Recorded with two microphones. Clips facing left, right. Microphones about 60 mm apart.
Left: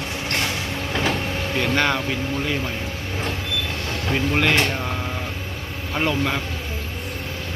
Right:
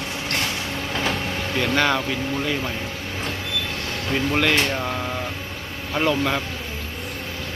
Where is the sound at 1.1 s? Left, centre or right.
Centre.